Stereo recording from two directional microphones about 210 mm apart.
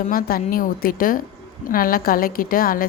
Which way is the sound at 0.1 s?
45° left (ahead or behind).